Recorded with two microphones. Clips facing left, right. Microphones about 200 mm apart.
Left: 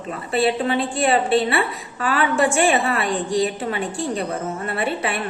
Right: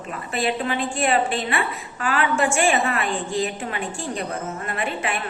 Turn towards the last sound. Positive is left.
turn(degrees=35)  # may be behind; listen again after turning